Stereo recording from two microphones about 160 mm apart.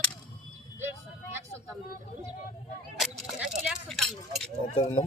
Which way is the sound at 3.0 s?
Centre (ahead or behind).